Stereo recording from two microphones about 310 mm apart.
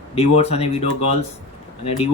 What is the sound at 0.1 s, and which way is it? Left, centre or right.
Speech, centre.